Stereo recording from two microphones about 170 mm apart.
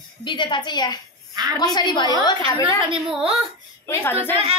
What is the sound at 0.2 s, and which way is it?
Speech, 25° left (ahead or behind).